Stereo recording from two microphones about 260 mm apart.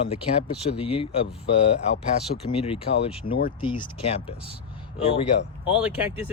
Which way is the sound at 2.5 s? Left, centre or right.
Left.